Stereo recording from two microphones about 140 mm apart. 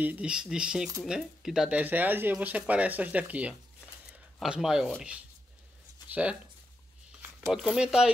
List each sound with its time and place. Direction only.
0.0 s speech: 10° right (ahead or behind)
7.4 s speech: 5° right (ahead or behind)